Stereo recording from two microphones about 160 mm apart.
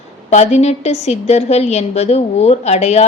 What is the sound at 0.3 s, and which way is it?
A woman's voice, 45° left (ahead or behind).